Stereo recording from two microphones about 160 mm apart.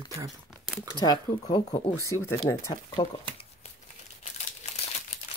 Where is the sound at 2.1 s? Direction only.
20° left (ahead or behind).